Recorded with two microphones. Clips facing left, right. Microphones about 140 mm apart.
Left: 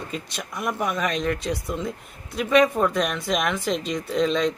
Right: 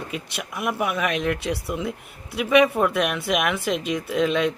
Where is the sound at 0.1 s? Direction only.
5° right (ahead or behind).